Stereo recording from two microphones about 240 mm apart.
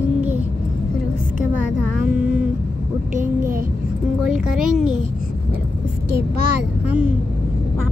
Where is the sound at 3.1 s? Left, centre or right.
Right.